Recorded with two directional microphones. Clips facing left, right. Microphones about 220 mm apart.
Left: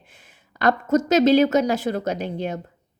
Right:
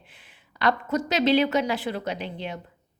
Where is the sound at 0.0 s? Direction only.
45° left (ahead or behind).